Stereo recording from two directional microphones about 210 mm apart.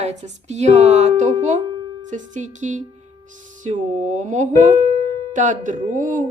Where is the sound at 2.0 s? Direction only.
35° right (ahead or behind).